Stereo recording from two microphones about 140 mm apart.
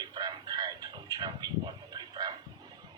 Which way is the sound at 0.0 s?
30° right (ahead or behind).